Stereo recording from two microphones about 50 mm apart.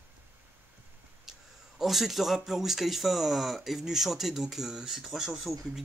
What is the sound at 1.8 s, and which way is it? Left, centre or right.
Speech, centre.